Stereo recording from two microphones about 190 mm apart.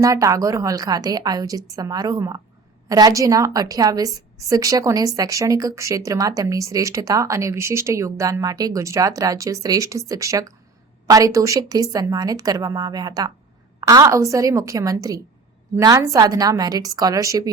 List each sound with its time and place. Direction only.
0.0 s a woman's voice: 15° right (ahead or behind)